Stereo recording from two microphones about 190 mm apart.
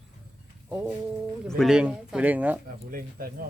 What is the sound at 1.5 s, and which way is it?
A man's voice, centre (ahead or behind).